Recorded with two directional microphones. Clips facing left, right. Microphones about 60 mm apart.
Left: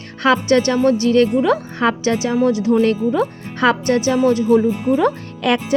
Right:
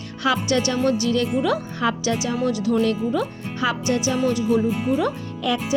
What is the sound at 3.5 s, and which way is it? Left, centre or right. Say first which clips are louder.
Speech: left 7 dB; left.